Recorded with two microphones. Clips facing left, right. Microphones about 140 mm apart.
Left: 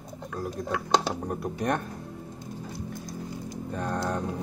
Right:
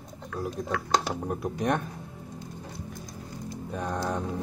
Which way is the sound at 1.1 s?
Centre (ahead or behind).